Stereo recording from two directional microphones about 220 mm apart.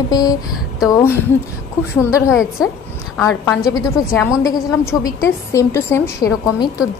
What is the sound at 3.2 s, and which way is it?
A woman's voice, 15° left (ahead or behind).